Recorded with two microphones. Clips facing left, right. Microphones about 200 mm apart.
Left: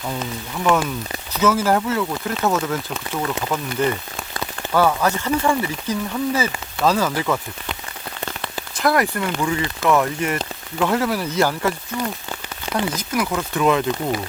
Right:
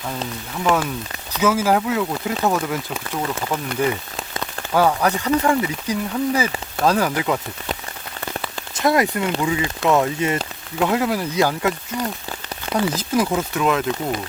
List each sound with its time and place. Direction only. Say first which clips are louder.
1.4 s speech: even; 10° right (ahead or behind)
8.8 s speech: right 1 dB; 20° right (ahead or behind)
12.7 s speech: right 3 dB; 25° right (ahead or behind)
13.6 s speech: left 4 dB; centre (ahead or behind)